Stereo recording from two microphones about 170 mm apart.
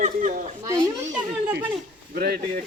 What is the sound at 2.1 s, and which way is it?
Speech, 60° right (ahead or behind).